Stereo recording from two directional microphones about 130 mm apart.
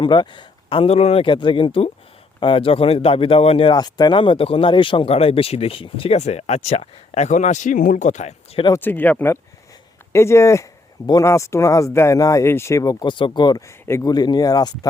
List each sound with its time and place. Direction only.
0.0 s speech: 35° left (ahead or behind)
3.7 s speech: 30° left (ahead or behind); by 8.6 s 60° left (ahead or behind)
8.7 s speech: 15° left (ahead or behind); by 13.6 s 35° left (ahead or behind)
13.7 s speech: 20° left (ahead or behind)